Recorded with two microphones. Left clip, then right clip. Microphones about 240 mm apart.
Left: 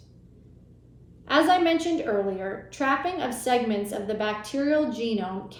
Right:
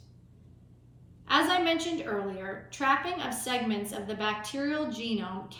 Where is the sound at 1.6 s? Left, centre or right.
Centre.